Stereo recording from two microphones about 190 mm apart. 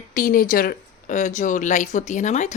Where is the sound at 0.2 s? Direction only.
45° left (ahead or behind).